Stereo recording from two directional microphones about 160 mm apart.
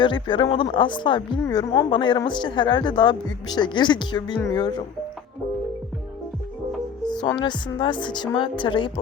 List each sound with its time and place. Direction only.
0.0 s speech: 30° left (ahead or behind)
7.1 s speech: 25° left (ahead or behind)